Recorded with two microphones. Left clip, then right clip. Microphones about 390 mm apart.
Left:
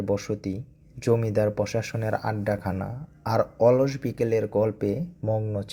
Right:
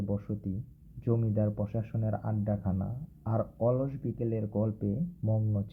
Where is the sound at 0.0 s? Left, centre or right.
Centre.